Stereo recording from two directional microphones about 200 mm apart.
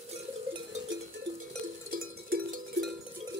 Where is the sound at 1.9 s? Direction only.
45° right (ahead or behind).